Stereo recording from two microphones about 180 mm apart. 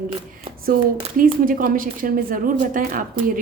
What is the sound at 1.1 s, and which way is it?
A woman's voice, 50° right (ahead or behind).